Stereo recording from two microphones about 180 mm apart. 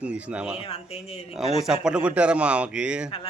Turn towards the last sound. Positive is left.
turn(degrees=-5)  # may be behind; listen again after turning